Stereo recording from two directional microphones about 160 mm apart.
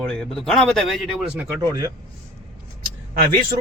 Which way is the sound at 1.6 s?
25° right (ahead or behind).